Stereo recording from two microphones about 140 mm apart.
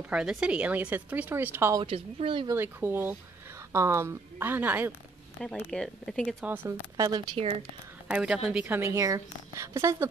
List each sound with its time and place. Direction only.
0.1 s a woman's voice: 5° right (ahead or behind)
2.1 s speech: 40° right (ahead or behind)
2.4 s a woman's voice: 15° right (ahead or behind)
5.7 s speech: 5° left (ahead or behind)
6.4 s a woman's voice: 15° right (ahead or behind)
7.0 s speech: 25° right (ahead or behind)
8.1 s a woman's voice: 5° right (ahead or behind)